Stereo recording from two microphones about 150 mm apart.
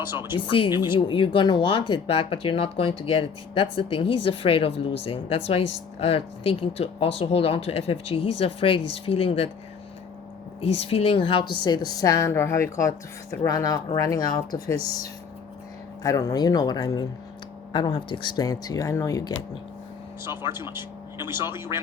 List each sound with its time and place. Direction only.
0.0 s speech: 15° right (ahead or behind)
0.3 s speech: 35° left (ahead or behind)
10.6 s speech: 40° left (ahead or behind)
16.0 s speech: 20° left (ahead or behind)
20.2 s speech: 15° right (ahead or behind)